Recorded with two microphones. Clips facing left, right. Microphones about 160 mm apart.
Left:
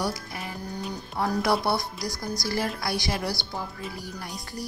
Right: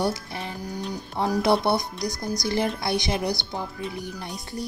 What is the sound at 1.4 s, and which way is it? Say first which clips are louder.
A woman's voice: right 4 dB; 25° right (ahead or behind).